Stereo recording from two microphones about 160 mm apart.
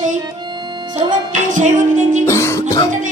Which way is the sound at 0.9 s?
50° right (ahead or behind).